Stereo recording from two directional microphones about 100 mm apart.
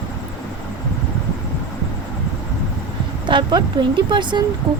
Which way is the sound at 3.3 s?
50° right (ahead or behind).